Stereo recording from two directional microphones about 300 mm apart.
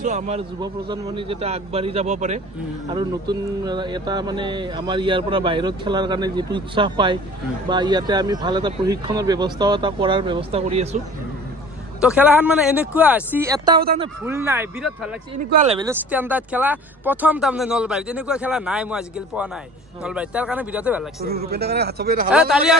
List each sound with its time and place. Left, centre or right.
0.0 s speech: right
12.0 s speech: centre
15.5 s speech: centre
15.9 s speech: centre
21.2 s speech: right
22.3 s speech: centre